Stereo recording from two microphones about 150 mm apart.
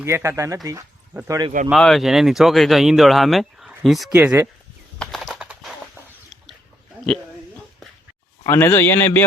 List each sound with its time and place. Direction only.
0.0 s speech: 15° right (ahead or behind)
1.7 s speech: centre (ahead or behind)
4.2 s speech: 10° right (ahead or behind)
4.9 s typing: centre (ahead or behind)
8.4 s a man's voice: 15° left (ahead or behind)